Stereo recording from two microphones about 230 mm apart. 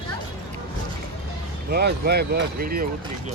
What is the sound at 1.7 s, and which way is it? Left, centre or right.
Speech, right.